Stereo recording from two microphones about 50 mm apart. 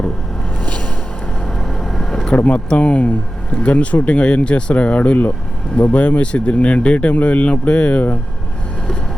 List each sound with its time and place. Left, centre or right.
0.6 s a sound: left
1.5 s vehicle: centre
2.3 s speech: left